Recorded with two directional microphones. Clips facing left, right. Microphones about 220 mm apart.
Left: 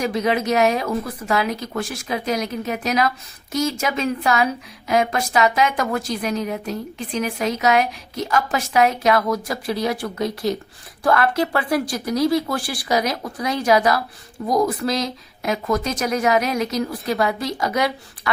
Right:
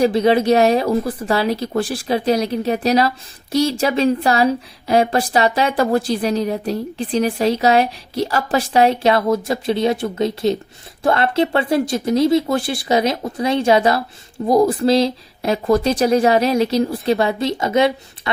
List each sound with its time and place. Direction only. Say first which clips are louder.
0.0 s a woman's voice: right 7 dB; 30° right (ahead or behind)